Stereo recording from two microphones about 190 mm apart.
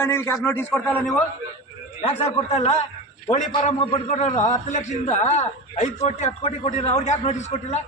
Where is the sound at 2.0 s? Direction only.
35° left (ahead or behind).